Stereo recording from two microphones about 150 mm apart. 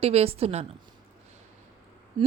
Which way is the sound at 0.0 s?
40° right (ahead or behind).